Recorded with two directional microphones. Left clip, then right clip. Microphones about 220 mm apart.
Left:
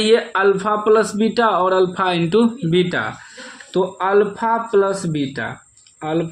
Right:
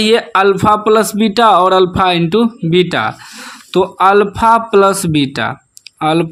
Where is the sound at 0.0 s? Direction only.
25° right (ahead or behind).